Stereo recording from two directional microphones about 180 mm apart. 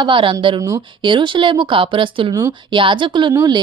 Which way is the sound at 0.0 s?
25° right (ahead or behind).